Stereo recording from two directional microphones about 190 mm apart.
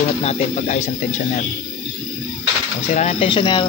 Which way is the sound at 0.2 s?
35° left (ahead or behind).